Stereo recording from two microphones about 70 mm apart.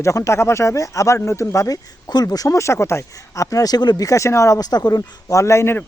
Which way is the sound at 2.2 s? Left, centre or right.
Left.